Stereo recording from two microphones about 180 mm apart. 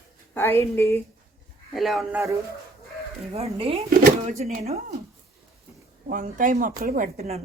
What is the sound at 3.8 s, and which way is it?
Speech, 55° right (ahead or behind).